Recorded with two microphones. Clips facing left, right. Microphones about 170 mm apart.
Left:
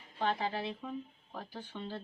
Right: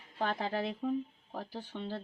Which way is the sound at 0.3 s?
45° right (ahead or behind).